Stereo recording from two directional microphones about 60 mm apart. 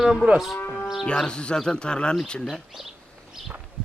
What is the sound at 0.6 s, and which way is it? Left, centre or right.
Moo, left.